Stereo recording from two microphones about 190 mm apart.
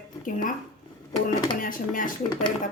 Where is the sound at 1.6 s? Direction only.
45° left (ahead or behind).